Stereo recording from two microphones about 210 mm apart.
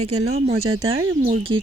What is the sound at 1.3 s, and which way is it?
Speech, 25° right (ahead or behind).